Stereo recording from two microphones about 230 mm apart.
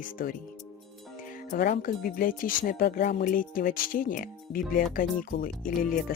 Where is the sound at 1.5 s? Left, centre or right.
Left.